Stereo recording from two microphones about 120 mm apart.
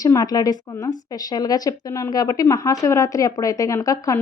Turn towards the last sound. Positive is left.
turn(degrees=30)  # may be behind; listen again after turning